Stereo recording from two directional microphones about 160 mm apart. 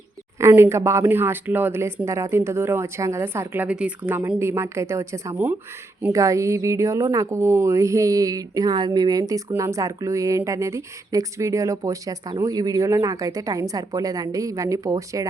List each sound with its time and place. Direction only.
0.3 s a woman's voice: 15° right (ahead or behind)